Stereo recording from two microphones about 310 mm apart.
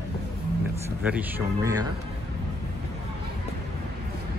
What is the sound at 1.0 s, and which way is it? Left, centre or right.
Speech, centre.